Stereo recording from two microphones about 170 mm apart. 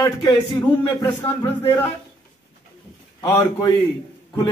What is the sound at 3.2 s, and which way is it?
Speech, 20° left (ahead or behind).